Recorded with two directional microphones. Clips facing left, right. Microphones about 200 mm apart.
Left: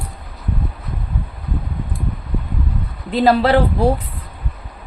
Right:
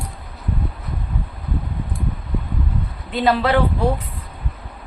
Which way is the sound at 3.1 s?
35° left (ahead or behind).